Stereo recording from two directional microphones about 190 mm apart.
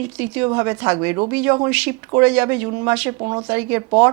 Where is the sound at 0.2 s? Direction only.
15° right (ahead or behind).